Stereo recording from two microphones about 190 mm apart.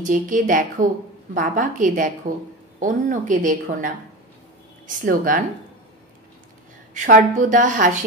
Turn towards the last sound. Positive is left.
turn(degrees=-45)  # may be behind; listen again after turning